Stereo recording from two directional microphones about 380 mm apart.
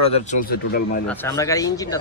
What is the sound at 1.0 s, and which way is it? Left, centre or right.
Speech, centre.